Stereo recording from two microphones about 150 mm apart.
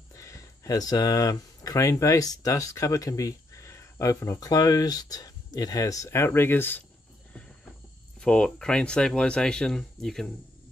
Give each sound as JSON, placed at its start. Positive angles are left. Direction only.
{"t": 0.1, "sound": "speech", "side_deg": 20}
{"t": 8.2, "sound": "speech", "side_deg": 5}